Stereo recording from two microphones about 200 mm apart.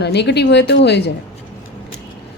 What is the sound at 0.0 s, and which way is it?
A man's voice, 55° left (ahead or behind).